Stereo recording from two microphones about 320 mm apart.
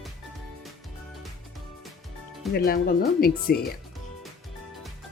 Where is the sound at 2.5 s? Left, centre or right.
Left.